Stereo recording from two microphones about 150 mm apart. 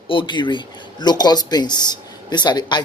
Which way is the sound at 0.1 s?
35° left (ahead or behind).